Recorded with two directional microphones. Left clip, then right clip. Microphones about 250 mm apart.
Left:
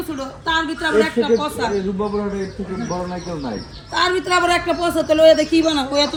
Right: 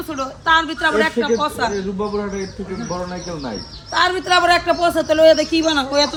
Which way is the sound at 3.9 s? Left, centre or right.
Centre.